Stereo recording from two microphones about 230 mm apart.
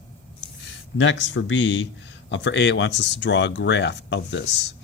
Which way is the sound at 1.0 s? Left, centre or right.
Left.